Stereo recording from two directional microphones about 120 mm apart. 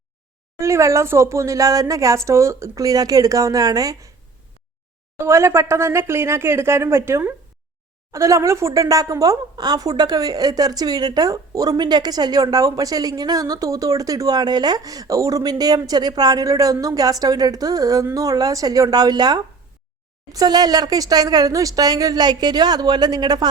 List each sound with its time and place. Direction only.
0.6 s a woman's voice: 25° right (ahead or behind)
5.1 s a woman's voice: 20° right (ahead or behind)